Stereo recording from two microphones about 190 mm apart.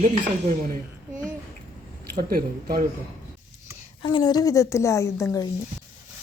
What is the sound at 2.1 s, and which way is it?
Speech, 50° right (ahead or behind).